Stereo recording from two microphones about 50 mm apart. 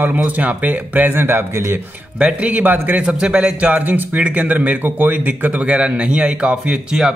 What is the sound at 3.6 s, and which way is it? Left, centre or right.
Speech, right.